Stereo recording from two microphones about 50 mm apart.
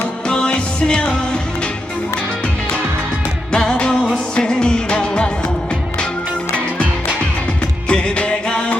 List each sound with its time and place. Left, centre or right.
0.3 s music: centre
3.5 s music: centre
7.9 s music: centre